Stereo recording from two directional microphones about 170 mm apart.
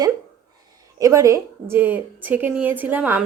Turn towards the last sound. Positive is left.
turn(degrees=-10)  # may be behind; listen again after turning